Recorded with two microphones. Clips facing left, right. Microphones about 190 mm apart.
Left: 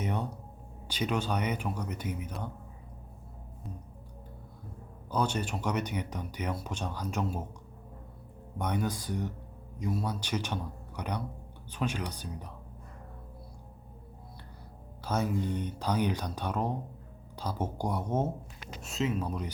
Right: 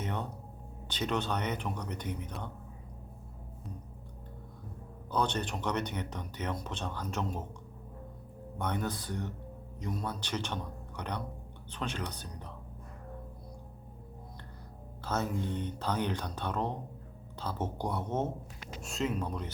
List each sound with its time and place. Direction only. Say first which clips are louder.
0.0 s music: left 3 dB; 10° left (ahead or behind)
0.9 s speech: left 2 dB; 10° left (ahead or behind)
5.1 s speech: left 1 dB; 10° left (ahead or behind)
8.5 s speech: left 2 dB; 10° left (ahead or behind)
15.0 s speech: left 3 dB; 10° left (ahead or behind)